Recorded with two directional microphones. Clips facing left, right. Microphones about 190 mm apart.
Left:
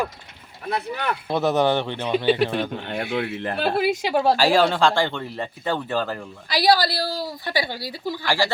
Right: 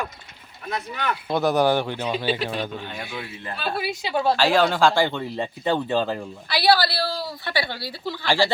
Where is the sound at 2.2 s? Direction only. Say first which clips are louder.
Left 5 dB; 60° left (ahead or behind).